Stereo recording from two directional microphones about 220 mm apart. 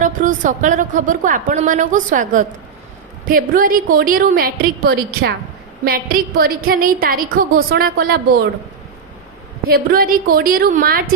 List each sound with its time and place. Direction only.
0.0 s a woman's voice: 35° right (ahead or behind)
9.6 s a woman's voice: 40° right (ahead or behind)